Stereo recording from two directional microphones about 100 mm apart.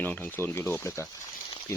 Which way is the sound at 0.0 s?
15° left (ahead or behind).